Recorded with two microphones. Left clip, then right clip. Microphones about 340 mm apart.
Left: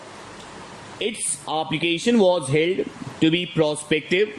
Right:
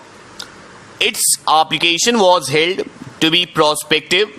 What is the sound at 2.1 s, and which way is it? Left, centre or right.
Speech, right.